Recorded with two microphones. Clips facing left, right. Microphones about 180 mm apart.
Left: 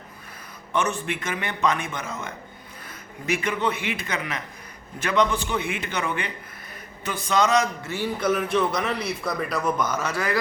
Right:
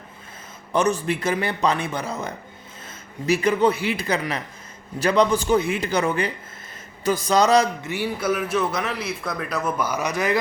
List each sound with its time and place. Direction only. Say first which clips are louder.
0.7 s a man's voice: right 5 dB; 40° right (ahead or behind)
7.9 s a man's voice: even; 10° right (ahead or behind)